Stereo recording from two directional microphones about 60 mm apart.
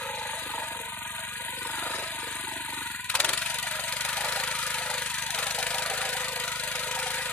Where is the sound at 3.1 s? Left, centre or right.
Left.